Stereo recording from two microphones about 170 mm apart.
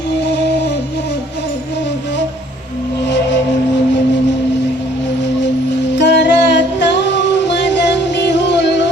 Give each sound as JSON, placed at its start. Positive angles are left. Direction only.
{"t": 6.0, "sound": "music", "side_deg": 90}